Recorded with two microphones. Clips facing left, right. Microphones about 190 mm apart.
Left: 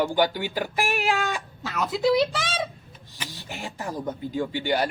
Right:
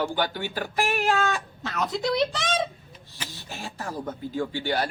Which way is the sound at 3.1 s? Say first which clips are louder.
Left 2 dB; 15° left (ahead or behind).